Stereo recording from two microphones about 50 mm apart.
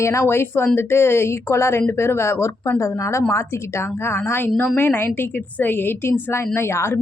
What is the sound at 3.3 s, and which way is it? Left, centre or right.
Speech, left.